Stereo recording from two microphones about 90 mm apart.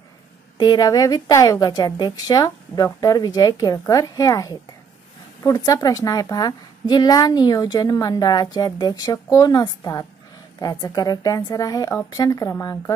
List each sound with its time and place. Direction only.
0.6 s a woman's voice: 50° left (ahead or behind)